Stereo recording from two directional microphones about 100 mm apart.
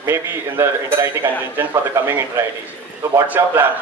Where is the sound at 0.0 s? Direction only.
25° right (ahead or behind).